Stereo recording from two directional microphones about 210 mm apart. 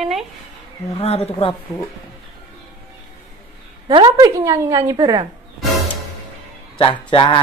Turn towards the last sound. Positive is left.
turn(degrees=25)  # may be behind; listen again after turning